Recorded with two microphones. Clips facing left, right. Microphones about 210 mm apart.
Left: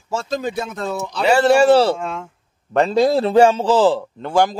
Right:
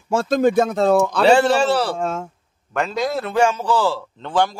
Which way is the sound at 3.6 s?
20° left (ahead or behind).